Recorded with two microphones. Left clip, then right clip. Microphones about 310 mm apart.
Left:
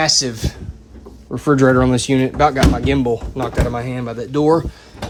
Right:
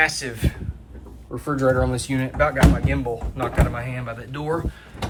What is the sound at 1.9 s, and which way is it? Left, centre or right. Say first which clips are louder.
Speech: left 7 dB; centre.